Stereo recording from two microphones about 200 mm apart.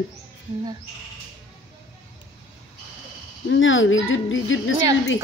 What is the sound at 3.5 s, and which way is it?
Speech, 75° left (ahead or behind).